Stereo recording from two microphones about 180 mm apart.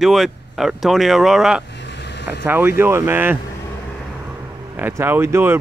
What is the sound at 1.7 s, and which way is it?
Vehicle, 75° left (ahead or behind).